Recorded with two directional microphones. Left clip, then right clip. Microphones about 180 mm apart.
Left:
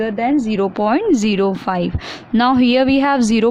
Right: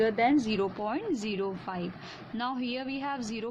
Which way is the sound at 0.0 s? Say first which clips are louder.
Left 7 dB; 30° left (ahead or behind).